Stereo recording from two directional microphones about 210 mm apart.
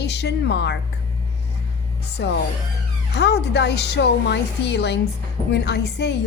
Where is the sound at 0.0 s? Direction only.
55° left (ahead or behind).